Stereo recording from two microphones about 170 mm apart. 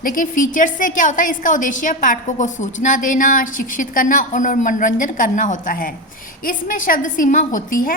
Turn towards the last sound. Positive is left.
turn(degrees=50)  # may be behind; listen again after turning